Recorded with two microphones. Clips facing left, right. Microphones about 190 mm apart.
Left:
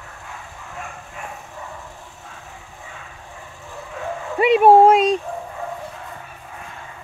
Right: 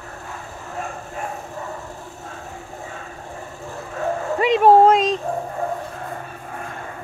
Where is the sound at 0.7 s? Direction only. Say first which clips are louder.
Right 6 dB; 40° right (ahead or behind).